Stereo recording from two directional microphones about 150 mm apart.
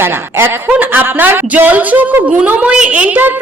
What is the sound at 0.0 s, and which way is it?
Speech, 15° right (ahead or behind).